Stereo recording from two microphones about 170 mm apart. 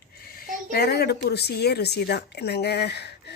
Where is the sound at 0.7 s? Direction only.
70° left (ahead or behind).